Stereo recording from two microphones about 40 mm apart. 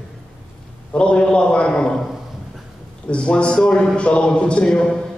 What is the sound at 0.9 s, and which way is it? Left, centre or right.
Speech, left.